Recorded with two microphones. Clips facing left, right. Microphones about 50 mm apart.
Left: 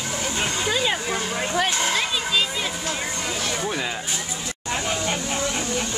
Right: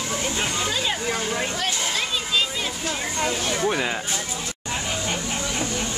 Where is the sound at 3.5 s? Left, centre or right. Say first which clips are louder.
Right 3 dB; centre.